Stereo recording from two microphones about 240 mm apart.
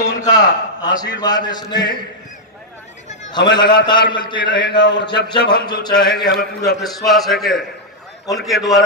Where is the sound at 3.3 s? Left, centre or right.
Centre.